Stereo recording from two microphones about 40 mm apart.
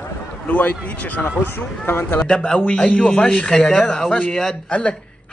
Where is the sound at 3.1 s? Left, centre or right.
Left; by 4.1 s centre.